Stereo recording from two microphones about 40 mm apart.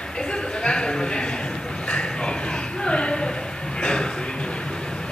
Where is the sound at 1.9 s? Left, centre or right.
Left.